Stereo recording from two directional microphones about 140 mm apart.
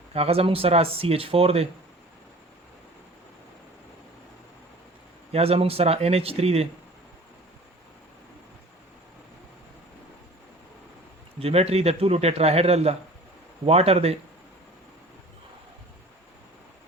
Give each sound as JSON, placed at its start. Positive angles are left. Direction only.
{"t": 0.1, "sound": "a man's voice", "side_deg": -45}
{"t": 5.3, "sound": "a man's voice", "side_deg": -45}
{"t": 11.3, "sound": "a man's voice", "side_deg": -45}